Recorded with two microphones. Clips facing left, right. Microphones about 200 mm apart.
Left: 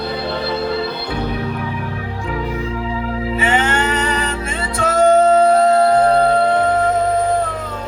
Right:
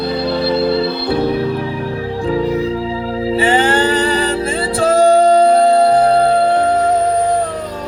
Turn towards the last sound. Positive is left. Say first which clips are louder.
# right 2 dB
turn(degrees=-30)  # may be behind; listen again after turning